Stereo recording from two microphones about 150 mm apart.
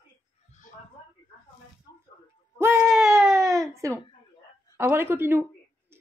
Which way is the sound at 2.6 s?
15° right (ahead or behind).